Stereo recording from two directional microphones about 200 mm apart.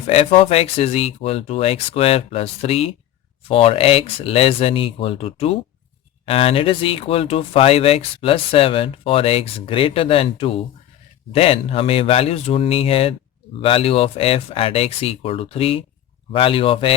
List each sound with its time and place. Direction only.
0.1 s speech: 35° left (ahead or behind)